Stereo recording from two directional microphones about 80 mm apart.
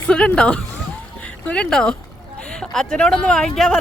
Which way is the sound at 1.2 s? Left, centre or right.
Centre.